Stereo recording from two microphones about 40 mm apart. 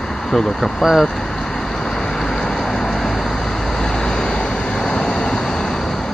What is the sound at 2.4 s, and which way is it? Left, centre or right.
Vehicle, centre.